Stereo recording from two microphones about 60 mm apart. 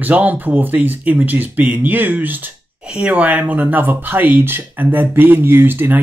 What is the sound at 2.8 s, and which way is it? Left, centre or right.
Speech, centre.